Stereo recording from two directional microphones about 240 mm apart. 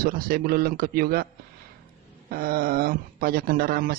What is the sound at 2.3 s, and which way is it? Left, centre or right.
Speech, right.